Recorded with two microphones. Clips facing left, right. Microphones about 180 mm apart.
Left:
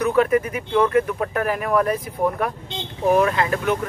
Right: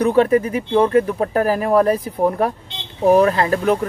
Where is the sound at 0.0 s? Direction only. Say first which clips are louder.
Right 4 dB; 30° right (ahead or behind).